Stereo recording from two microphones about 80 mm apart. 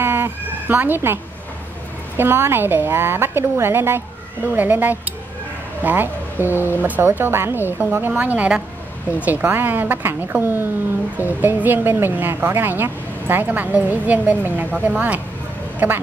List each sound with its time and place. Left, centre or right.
0.0 s speech: right